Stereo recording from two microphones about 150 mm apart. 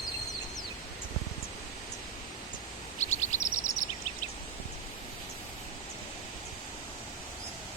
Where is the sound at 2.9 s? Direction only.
50° left (ahead or behind).